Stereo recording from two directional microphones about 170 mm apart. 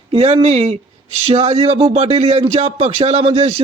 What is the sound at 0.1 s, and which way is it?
Speech, 35° right (ahead or behind).